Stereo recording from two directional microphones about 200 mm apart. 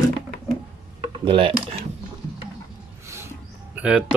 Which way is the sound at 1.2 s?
25° right (ahead or behind).